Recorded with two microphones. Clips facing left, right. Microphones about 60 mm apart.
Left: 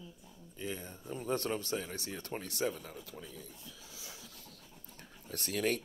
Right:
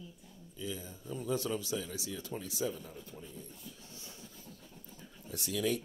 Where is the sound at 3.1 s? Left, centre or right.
Left.